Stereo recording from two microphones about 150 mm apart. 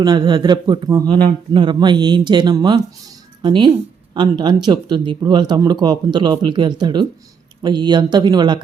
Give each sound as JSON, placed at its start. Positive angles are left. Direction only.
{"t": 0.0, "sound": "speech", "side_deg": -25}